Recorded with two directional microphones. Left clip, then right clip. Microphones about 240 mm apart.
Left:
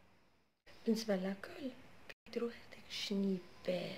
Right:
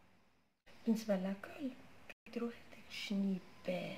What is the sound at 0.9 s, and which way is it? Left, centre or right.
Speech, centre.